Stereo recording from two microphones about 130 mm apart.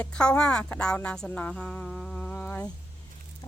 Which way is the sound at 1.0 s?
5° left (ahead or behind).